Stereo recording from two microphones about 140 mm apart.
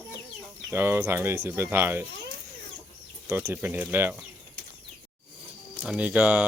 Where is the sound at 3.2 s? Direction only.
15° right (ahead or behind).